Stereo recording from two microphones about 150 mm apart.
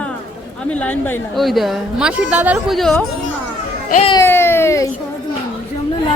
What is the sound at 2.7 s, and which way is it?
Speech, centre (ahead or behind).